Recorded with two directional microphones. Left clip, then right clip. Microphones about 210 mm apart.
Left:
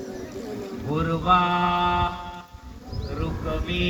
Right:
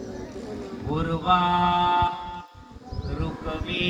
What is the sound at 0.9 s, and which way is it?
Mantra, 45° right (ahead or behind).